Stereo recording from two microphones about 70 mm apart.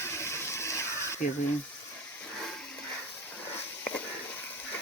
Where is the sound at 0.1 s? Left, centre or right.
Left.